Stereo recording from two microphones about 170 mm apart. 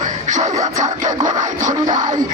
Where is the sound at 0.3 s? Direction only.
45° right (ahead or behind).